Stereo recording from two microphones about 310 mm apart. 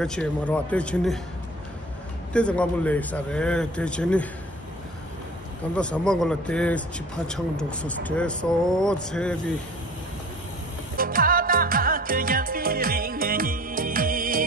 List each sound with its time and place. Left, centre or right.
0.0 s speech: centre
2.3 s speech: centre
5.8 s speech: centre
11.0 s music: right